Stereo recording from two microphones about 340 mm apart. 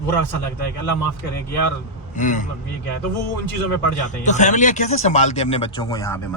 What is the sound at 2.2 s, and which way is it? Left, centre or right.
Speech, left.